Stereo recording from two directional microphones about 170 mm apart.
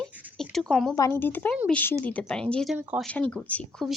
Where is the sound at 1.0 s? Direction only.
15° left (ahead or behind).